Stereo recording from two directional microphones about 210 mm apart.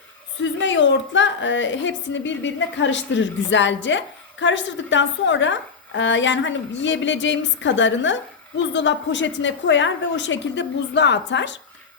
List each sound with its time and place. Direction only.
0.3 s a woman's voice: 60° left (ahead or behind)